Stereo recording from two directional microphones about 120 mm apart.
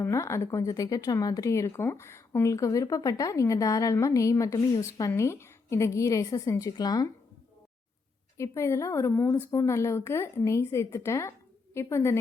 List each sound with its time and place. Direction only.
0.0 s speech: 25° left (ahead or behind)
8.4 s speech: 25° left (ahead or behind)